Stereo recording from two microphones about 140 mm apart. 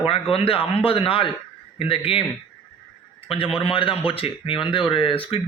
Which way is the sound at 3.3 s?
40° left (ahead or behind).